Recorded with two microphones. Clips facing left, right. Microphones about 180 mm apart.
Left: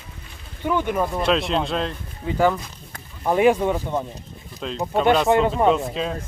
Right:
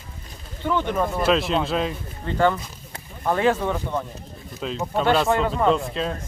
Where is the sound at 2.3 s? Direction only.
5° left (ahead or behind).